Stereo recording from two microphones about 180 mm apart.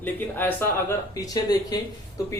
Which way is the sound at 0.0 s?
10° left (ahead or behind).